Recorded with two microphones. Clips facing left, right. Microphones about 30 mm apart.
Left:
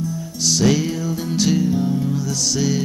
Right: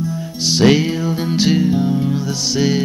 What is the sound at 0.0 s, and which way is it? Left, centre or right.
Music, right.